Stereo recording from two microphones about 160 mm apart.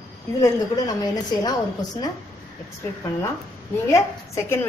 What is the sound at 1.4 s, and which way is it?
Speech, 25° left (ahead or behind).